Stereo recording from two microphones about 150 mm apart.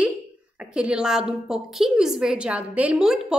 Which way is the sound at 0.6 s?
5° right (ahead or behind).